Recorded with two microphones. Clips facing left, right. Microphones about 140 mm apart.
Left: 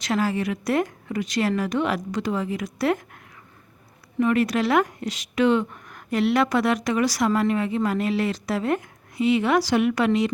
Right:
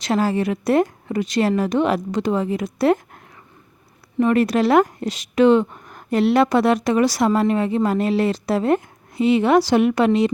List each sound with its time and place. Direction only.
0.0 s speech: 30° right (ahead or behind)
4.2 s speech: 35° right (ahead or behind)